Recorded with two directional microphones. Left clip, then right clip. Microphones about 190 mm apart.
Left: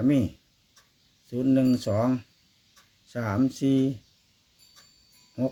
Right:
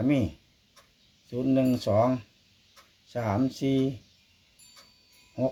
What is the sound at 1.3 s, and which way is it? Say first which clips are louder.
Speech: left 2 dB; 30° left (ahead or behind).